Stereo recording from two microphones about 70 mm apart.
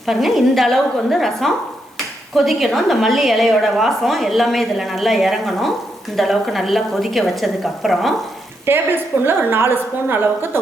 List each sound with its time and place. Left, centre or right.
0.0 s a woman's voice: centre
8.6 s a woman's voice: right